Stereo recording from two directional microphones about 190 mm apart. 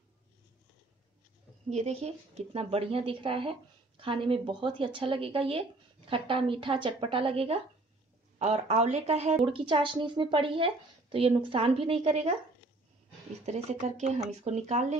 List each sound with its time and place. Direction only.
1.7 s a woman's voice: 35° right (ahead or behind)
13.5 s speech: 35° right (ahead or behind)